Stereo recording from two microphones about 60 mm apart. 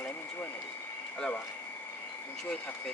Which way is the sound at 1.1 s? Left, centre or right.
Left.